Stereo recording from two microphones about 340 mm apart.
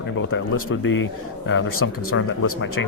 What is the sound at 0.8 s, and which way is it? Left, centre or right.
Speech, left.